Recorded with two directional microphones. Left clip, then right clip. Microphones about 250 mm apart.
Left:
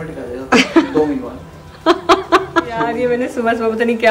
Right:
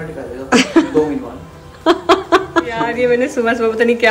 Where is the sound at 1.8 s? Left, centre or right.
Centre.